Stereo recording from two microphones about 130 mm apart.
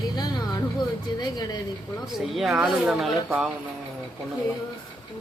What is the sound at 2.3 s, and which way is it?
Speech, centre (ahead or behind).